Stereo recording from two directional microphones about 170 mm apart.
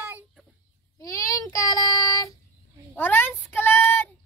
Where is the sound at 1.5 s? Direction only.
20° left (ahead or behind).